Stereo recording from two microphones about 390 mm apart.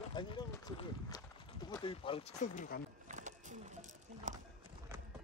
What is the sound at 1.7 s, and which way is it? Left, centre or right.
Speech, centre.